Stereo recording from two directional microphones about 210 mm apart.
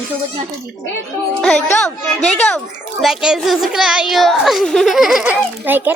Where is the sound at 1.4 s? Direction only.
5° left (ahead or behind).